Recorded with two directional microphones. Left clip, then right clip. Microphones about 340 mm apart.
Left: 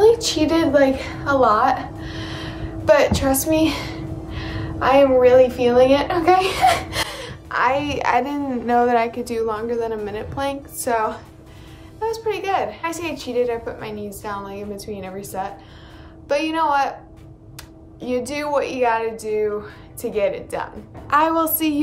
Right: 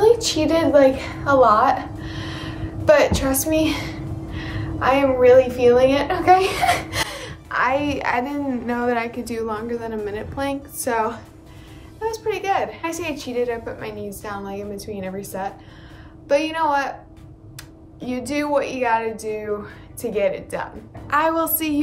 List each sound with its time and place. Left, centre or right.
0.0 s a woman's voice: centre
18.0 s a woman's voice: centre